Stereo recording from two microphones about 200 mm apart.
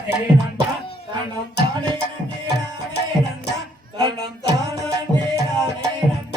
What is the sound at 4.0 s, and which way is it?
Music, 20° right (ahead or behind).